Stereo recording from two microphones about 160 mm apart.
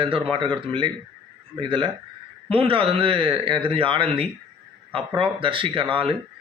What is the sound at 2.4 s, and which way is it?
Speech, 35° right (ahead or behind).